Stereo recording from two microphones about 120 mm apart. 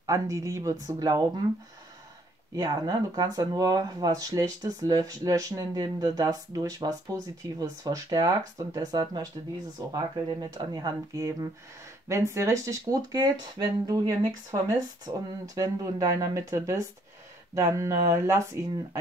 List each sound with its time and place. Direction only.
0.0 s speech: 25° right (ahead or behind)
2.5 s speech: 35° right (ahead or behind)